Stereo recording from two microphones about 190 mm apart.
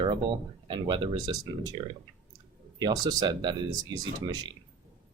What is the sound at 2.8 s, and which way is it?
Speech, 20° right (ahead or behind).